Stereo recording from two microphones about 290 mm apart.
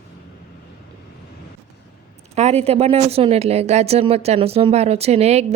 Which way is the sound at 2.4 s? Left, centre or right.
Right.